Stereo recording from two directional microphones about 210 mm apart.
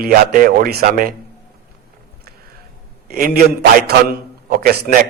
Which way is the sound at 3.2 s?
45° right (ahead or behind).